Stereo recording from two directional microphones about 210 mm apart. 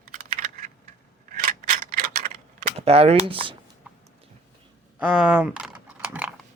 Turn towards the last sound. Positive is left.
turn(degrees=-5)  # may be behind; listen again after turning